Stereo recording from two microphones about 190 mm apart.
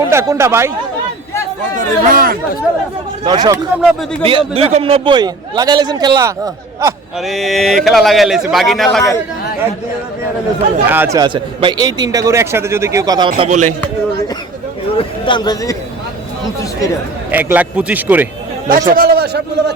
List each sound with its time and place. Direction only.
0.1 s a man's voice: 15° right (ahead or behind)
1.7 s a man's voice: 50° right (ahead or behind)
3.2 s a man's voice: 20° right (ahead or behind)
3.8 s speech: 5° right (ahead or behind)
4.2 s a man's voice: 30° right (ahead or behind)
7.2 s speech: centre (ahead or behind)
10.8 s a man's voice: 10° right (ahead or behind)
11.2 s a man's voice: 25° right (ahead or behind)
13.4 s speech: 40° right (ahead or behind)
14.9 s speech: 25° left (ahead or behind)
17.3 s a man's voice: 10° right (ahead or behind)
18.7 s a man's voice: 50° right (ahead or behind)